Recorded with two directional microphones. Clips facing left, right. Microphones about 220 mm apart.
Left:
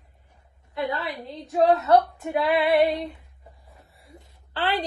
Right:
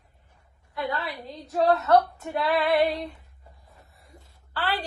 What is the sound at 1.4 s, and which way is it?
Speech, centre (ahead or behind).